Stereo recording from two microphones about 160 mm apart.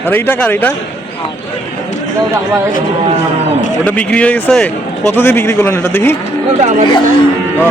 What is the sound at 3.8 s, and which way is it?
A man's voice, 10° left (ahead or behind).